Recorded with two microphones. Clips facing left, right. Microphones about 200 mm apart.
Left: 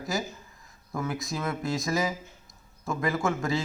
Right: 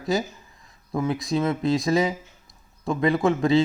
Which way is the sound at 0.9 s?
25° right (ahead or behind).